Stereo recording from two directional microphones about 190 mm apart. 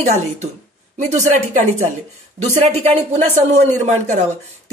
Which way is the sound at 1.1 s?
40° right (ahead or behind).